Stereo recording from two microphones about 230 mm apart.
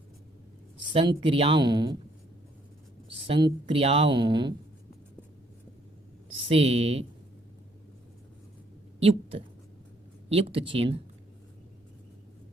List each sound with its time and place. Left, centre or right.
0.9 s speech: right
3.2 s speech: right
6.5 s speech: right
9.0 s speech: right